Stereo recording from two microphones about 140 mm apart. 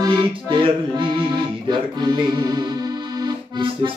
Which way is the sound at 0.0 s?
35° right (ahead or behind).